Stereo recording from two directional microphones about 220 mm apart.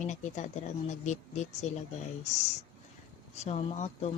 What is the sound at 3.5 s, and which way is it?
Speech, 30° left (ahead or behind).